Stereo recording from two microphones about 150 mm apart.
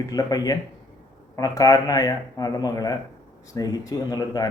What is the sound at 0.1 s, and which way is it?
A man's voice, 25° left (ahead or behind).